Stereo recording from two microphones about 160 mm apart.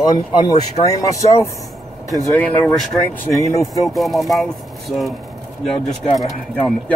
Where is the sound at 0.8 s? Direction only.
20° left (ahead or behind).